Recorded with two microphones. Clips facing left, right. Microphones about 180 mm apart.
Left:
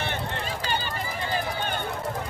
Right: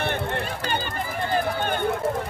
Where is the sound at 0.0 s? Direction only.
55° right (ahead or behind).